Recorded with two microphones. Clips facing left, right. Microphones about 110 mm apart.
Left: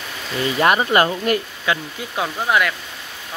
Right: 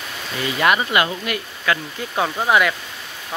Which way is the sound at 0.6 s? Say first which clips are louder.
Left 2 dB; 35° left (ahead or behind).